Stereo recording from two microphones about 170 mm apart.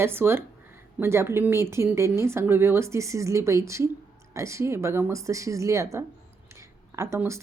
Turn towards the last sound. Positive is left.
turn(degrees=-15)  # may be behind; listen again after turning